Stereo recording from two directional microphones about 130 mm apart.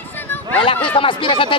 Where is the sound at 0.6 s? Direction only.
40° left (ahead or behind).